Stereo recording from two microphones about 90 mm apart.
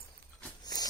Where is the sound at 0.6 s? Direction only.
50° left (ahead or behind).